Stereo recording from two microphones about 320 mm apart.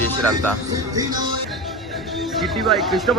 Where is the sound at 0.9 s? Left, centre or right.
Centre.